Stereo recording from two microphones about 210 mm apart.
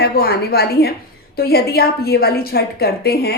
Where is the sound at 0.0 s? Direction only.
50° left (ahead or behind).